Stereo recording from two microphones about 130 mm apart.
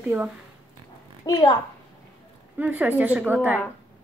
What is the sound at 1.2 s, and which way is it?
Speech, 30° left (ahead or behind).